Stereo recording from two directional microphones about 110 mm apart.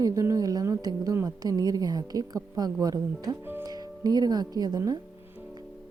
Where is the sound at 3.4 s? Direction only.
20° right (ahead or behind).